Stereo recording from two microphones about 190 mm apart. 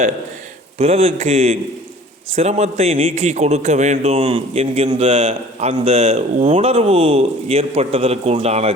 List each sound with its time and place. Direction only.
0.8 s a man's voice: 30° right (ahead or behind)